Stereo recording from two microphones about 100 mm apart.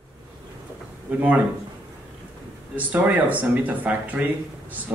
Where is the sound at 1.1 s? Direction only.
15° right (ahead or behind).